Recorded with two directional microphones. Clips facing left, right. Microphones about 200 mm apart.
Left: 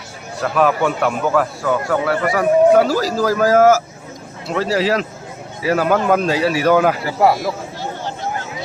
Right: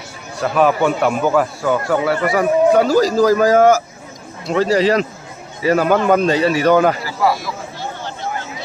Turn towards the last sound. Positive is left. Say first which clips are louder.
# left 3 dB
turn(degrees=60)  # may be behind; listen again after turning